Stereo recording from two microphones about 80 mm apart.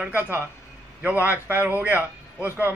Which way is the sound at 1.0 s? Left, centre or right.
Right.